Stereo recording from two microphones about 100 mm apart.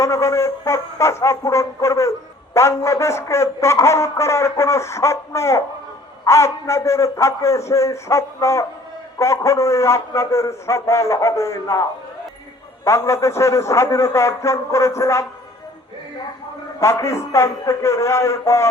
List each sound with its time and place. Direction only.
0.0 s brass instrument: 30° left (ahead or behind)
16.8 s brass instrument: 30° left (ahead or behind)